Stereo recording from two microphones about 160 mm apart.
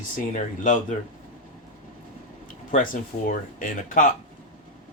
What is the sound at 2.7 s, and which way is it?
Speech, 55° left (ahead or behind).